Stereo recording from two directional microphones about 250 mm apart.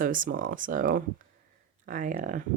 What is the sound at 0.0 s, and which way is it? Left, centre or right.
Speech, right.